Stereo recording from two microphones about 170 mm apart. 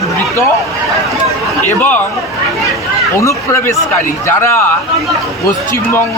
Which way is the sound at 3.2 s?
20° left (ahead or behind).